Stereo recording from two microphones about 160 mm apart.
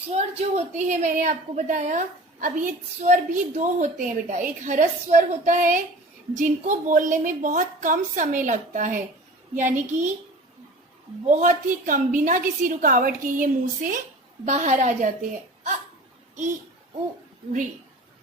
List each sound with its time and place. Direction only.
0.1 s a woman's voice: 45° right (ahead or behind)
11.3 s a woman's voice: 55° right (ahead or behind)